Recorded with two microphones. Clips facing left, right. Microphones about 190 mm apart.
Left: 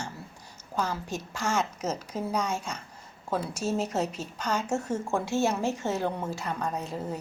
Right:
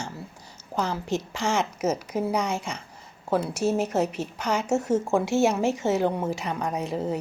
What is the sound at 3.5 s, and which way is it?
Speech, 60° right (ahead or behind).